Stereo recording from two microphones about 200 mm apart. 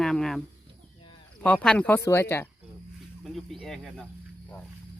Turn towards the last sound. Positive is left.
turn(degrees=5)  # may be behind; listen again after turning